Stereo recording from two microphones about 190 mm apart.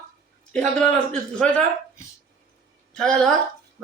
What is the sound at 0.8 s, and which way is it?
Speech, 5° left (ahead or behind).